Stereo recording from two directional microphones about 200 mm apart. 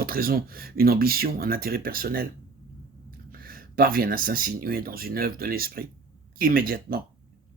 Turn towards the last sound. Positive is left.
turn(degrees=-45)  # may be behind; listen again after turning